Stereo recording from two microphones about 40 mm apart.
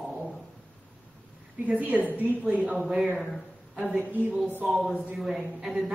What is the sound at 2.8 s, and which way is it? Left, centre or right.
Speech, centre.